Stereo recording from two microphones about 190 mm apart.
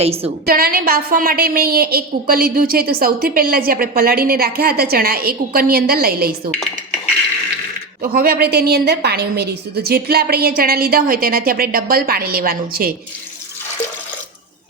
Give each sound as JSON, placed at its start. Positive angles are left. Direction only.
{"t": 0.0, "sound": "a woman's voice", "side_deg": -30}
{"t": 0.4, "sound": "a woman's voice", "side_deg": -50}
{"t": 8.1, "sound": "a woman's voice", "side_deg": -55}